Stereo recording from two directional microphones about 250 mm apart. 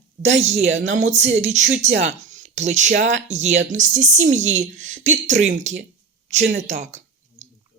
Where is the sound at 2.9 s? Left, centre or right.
Right.